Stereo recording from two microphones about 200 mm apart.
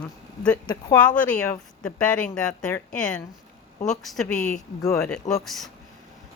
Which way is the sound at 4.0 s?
Centre (ahead or behind).